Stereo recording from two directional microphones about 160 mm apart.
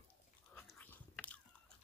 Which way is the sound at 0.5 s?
10° left (ahead or behind).